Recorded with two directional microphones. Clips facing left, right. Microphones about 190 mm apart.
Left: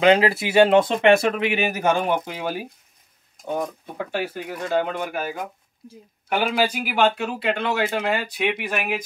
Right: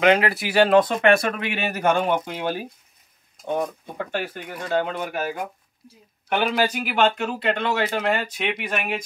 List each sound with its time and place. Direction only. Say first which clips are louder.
0.0 s speech: left 2 dB; 25° left (ahead or behind)
1.5 s speech: left 1 dB; 10° left (ahead or behind)